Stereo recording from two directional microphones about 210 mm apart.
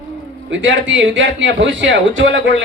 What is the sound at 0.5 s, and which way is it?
Speech, 65° right (ahead or behind).